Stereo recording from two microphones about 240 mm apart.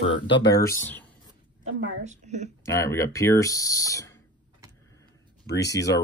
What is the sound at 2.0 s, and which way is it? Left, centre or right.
Speech, right.